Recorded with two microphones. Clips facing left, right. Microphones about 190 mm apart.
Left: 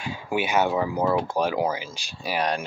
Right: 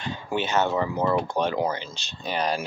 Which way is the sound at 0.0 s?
10° left (ahead or behind).